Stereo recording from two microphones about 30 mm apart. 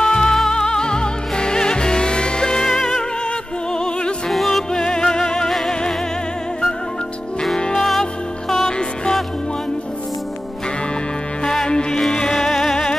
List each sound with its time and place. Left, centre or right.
0.0 s music: left
0.3 s music: centre
4.3 s music: centre
4.7 s music: left
7.7 s music: centre
8.0 s music: centre
11.5 s music: centre